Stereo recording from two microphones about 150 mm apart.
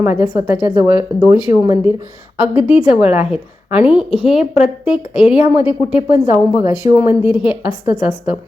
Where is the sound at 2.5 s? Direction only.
45° left (ahead or behind).